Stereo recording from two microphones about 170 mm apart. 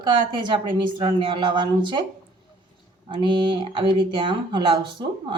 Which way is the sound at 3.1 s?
30° right (ahead or behind).